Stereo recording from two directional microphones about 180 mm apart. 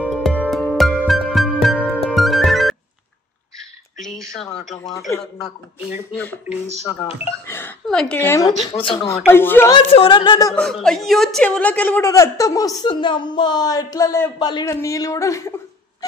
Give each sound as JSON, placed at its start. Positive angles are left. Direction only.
{"t": 0.0, "sound": "music", "side_deg": 5}
{"t": 4.0, "sound": "a sound", "side_deg": 0}
{"t": 6.9, "sound": "speech", "side_deg": 30}
{"t": 7.4, "sound": "speech", "side_deg": 10}
{"t": 8.6, "sound": "speech", "side_deg": 30}
{"t": 9.1, "sound": "a man's voice", "side_deg": 10}
{"t": 9.8, "sound": "speech", "side_deg": 30}
{"t": 10.5, "sound": "a man's voice", "side_deg": 5}
{"t": 16.0, "sound": "a sound", "side_deg": 20}